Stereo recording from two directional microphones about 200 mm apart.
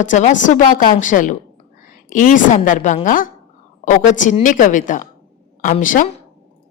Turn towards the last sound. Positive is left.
turn(degrees=40)  # may be behind; listen again after turning